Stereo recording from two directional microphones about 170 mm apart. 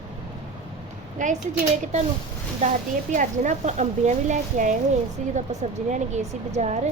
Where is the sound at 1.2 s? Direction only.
50° right (ahead or behind).